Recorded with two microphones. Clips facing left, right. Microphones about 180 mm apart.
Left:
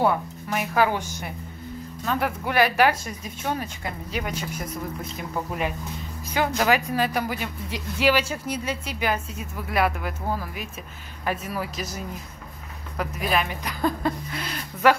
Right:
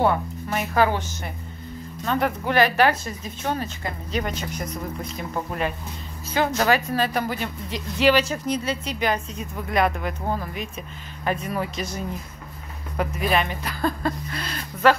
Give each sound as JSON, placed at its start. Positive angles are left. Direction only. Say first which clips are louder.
{"t": 0.0, "sound": "speech", "louder": "right 1 dB", "side_deg": 5}
{"t": 13.7, "sound": "speech", "louder": "even", "side_deg": 15}